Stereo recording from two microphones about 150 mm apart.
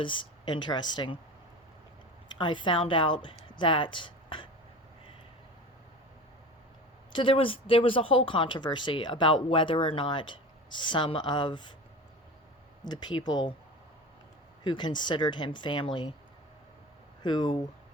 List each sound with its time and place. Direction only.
0.0 s speech: 35° left (ahead or behind)
2.4 s speech: 35° left (ahead or behind)
7.1 s speech: 35° left (ahead or behind)
12.8 s speech: 30° left (ahead or behind)
14.6 s speech: 30° left (ahead or behind)
17.2 s speech: 30° left (ahead or behind)